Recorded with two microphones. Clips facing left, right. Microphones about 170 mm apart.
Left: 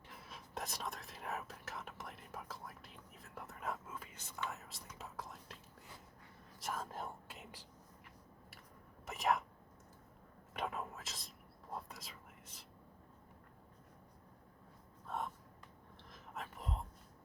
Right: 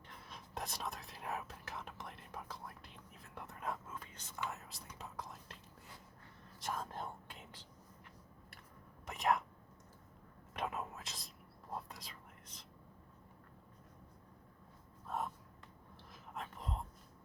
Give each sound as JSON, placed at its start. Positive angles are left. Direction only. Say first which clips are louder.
{"t": 0.1, "sound": "speech", "louder": "even", "side_deg": 5}
{"t": 6.6, "sound": "speech", "louder": "right 1 dB", "side_deg": 0}
{"t": 9.0, "sound": "speech", "louder": "right 1 dB", "side_deg": 0}
{"t": 10.5, "sound": "speech", "louder": "right 1 dB", "side_deg": 0}
{"t": 15.0, "sound": "a sound", "louder": "right 1 dB", "side_deg": -5}
{"t": 16.1, "sound": "whispering", "louder": "right 1 dB", "side_deg": 0}